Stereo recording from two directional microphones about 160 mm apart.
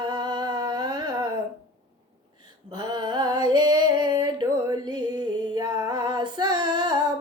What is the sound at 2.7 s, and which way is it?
Female singing, 30° right (ahead or behind).